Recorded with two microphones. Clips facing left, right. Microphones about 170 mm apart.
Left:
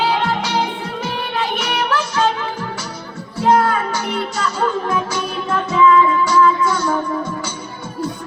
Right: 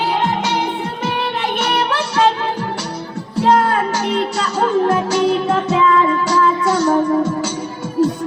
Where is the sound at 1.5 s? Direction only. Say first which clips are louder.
Right 3 dB; 30° right (ahead or behind).